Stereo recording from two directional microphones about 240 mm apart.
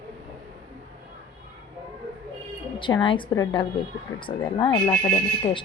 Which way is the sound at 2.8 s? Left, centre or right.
Left.